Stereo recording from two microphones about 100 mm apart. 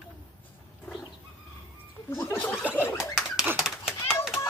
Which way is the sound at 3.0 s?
Centre (ahead or behind).